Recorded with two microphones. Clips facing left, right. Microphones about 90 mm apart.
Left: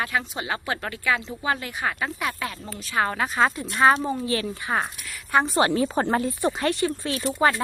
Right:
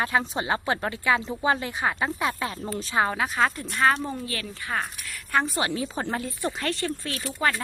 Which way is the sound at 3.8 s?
15° left (ahead or behind).